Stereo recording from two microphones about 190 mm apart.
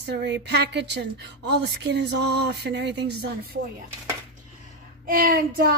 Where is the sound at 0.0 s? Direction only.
65° right (ahead or behind).